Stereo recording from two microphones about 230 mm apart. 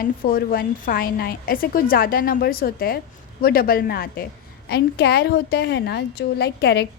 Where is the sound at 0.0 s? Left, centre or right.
Left.